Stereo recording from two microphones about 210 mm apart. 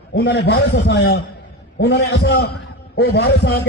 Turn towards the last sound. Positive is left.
turn(degrees=50)  # may be behind; listen again after turning